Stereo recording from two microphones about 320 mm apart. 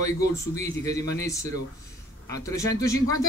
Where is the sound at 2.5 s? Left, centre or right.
Centre.